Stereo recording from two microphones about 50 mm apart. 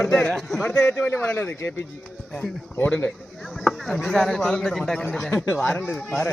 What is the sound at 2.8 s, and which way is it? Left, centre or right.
Speech, left.